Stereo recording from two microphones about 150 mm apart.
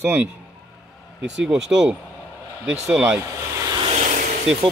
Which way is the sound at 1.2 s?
5° right (ahead or behind).